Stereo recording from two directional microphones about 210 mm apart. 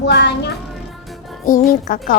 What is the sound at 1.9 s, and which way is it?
Speech, 40° left (ahead or behind).